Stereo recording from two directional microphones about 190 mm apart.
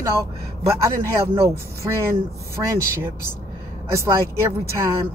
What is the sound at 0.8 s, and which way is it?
Speech, 15° right (ahead or behind).